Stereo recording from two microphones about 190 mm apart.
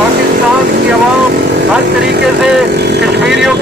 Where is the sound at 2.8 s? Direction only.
60° right (ahead or behind).